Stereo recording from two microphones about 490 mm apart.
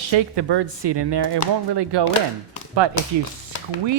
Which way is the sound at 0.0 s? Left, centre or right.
Right.